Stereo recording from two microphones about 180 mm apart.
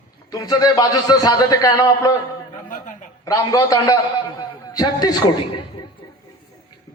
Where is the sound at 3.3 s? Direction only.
20° left (ahead or behind).